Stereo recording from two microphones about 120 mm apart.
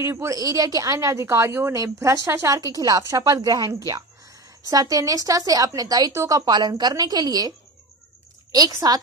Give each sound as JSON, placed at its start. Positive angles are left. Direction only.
{"t": 0.0, "sound": "speech", "side_deg": -25}